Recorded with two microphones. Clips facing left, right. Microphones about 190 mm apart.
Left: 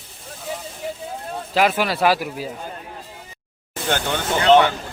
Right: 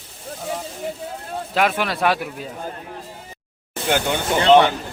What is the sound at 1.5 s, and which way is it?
Speech, centre (ahead or behind).